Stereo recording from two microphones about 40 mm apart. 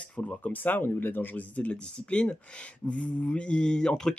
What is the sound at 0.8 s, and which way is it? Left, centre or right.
Speech, left.